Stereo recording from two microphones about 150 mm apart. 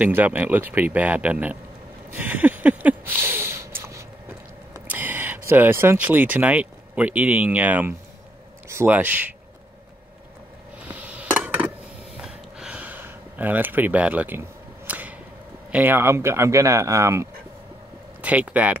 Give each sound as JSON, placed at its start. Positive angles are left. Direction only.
{"t": 0.0, "sound": "speech", "side_deg": -10}
{"t": 2.1, "sound": "a sound", "side_deg": -10}
{"t": 5.5, "sound": "speech", "side_deg": -15}
{"t": 10.9, "sound": "dishes", "side_deg": -10}
{"t": 12.2, "sound": "a sound", "side_deg": -5}
{"t": 14.9, "sound": "whip", "side_deg": -10}
{"t": 15.7, "sound": "speech", "side_deg": -15}